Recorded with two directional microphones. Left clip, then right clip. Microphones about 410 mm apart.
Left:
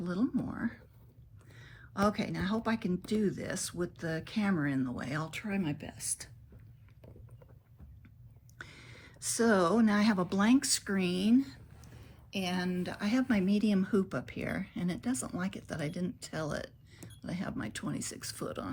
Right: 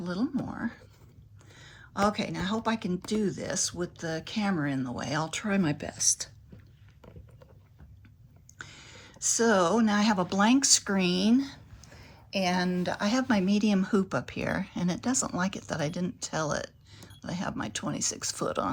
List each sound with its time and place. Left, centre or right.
0.0 s speech: centre
8.5 s speech: centre